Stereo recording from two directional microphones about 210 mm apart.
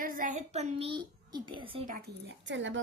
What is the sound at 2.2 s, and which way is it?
Speech, 60° right (ahead or behind).